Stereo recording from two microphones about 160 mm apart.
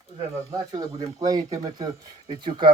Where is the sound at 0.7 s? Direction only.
20° right (ahead or behind).